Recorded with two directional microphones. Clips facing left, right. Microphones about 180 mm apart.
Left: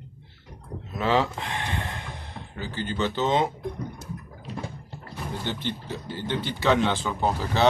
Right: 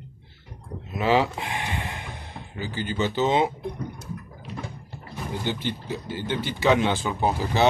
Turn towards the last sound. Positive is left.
turn(degrees=-10)  # may be behind; listen again after turning